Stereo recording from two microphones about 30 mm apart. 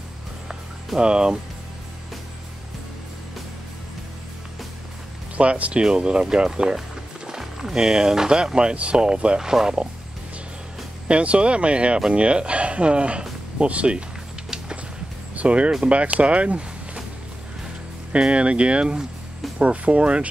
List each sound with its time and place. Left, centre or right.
0.9 s speech: right
5.4 s speech: right
5.9 s speech: right
8.6 s speech: right
8.9 s speech: right
11.1 s speech: right
15.3 s speech: right
18.2 s speech: right
19.6 s speech: right